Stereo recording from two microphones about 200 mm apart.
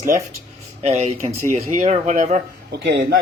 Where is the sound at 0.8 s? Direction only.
30° right (ahead or behind).